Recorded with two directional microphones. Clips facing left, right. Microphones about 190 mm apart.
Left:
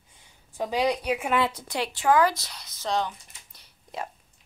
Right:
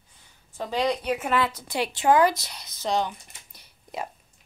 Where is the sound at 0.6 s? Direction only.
10° left (ahead or behind).